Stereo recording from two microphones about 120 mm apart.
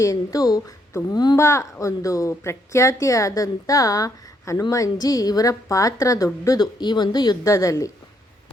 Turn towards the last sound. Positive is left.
turn(degrees=25)  # may be behind; listen again after turning